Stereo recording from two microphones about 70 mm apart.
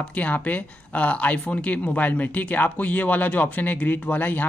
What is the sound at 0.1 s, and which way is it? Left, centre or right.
Speech, left.